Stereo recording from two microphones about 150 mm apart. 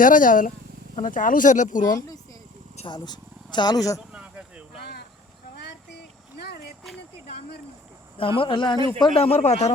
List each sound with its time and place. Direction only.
0.0 s speech: 65° left (ahead or behind)
2.7 s speech: 30° left (ahead or behind)
4.1 s a sound: 10° right (ahead or behind)
8.2 s speech: 35° left (ahead or behind)
9.1 s speech: 40° left (ahead or behind)